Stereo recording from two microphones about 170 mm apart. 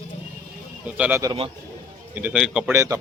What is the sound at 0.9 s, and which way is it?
A man's voice, 10° right (ahead or behind).